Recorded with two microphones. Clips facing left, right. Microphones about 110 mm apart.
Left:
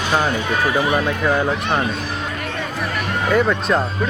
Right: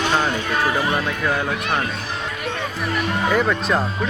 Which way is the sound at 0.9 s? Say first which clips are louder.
Left 3 dB; 20° left (ahead or behind).